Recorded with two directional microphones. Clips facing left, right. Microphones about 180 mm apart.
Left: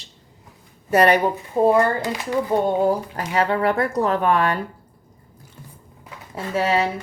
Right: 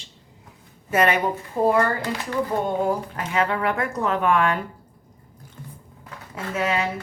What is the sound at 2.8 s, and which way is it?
Speech, 35° left (ahead or behind).